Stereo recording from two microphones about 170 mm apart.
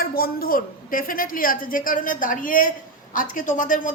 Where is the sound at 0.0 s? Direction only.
60° left (ahead or behind).